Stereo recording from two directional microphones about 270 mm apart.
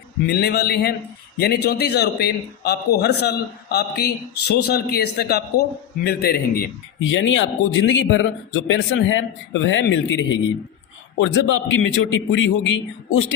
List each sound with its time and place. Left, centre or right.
0.3 s a man's voice: left